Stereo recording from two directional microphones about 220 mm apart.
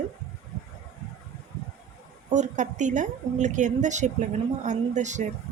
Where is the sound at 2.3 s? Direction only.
35° right (ahead or behind).